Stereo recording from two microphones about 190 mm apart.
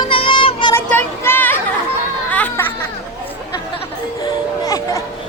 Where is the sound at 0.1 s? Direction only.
25° left (ahead or behind).